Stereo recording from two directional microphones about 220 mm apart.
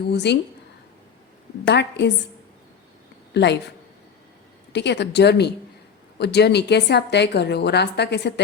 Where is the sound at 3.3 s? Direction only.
50° left (ahead or behind).